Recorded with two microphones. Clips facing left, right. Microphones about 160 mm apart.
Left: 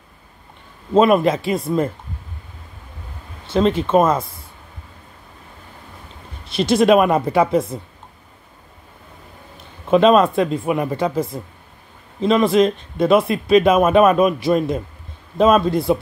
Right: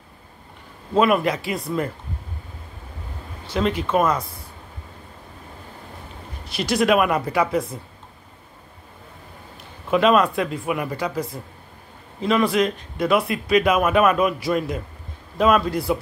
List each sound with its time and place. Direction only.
0.9 s speech: 25° left (ahead or behind)
3.5 s speech: 25° left (ahead or behind)
6.4 s speech: 25° left (ahead or behind)
9.8 s speech: 25° left (ahead or behind)